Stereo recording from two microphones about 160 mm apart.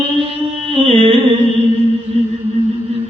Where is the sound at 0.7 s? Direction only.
30° right (ahead or behind).